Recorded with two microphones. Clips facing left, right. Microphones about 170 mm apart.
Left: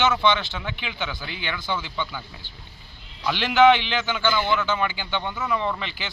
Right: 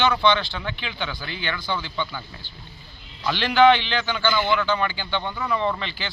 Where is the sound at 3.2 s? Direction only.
10° left (ahead or behind).